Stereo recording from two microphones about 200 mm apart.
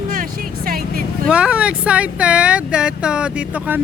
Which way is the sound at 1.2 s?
5° right (ahead or behind).